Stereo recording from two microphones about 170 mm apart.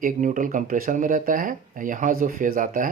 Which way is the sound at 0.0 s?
50° right (ahead or behind).